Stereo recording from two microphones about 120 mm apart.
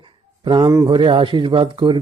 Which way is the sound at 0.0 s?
40° right (ahead or behind).